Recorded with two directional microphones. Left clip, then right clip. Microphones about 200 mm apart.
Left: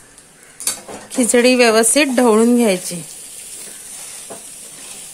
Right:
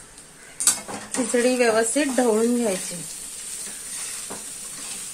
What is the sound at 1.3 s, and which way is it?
Speech, 50° left (ahead or behind).